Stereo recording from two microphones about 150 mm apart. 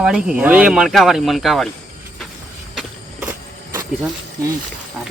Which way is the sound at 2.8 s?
10° right (ahead or behind).